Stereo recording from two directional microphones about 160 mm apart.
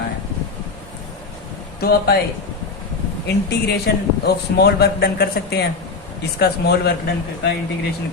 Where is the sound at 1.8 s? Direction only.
80° left.